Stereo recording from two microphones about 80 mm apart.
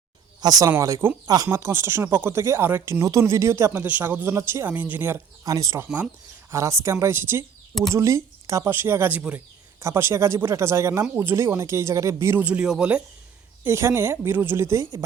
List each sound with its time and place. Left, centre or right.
0.4 s speech: right
1.0 s speech: right
3.0 s speech: right
3.8 s speech: right
4.7 s speech: right
5.5 s speech: right
8.7 s speech: right
9.8 s speech: right
12.4 s speech: centre
13.7 s speech: right